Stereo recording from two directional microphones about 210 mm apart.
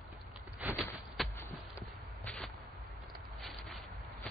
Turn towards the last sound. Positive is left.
turn(degrees=0)  # may be behind; listen again after turning